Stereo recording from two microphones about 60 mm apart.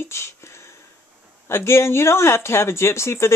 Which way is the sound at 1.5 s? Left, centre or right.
Left.